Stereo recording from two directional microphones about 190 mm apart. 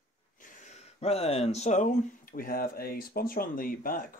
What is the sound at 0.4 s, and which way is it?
Speech, 40° left (ahead or behind).